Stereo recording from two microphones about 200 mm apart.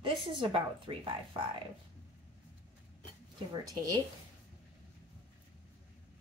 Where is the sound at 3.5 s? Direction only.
20° right (ahead or behind).